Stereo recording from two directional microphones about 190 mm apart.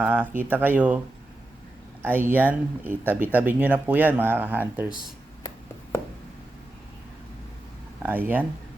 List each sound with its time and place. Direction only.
0.0 s speech: 10° right (ahead or behind)
8.0 s speech: 10° right (ahead or behind)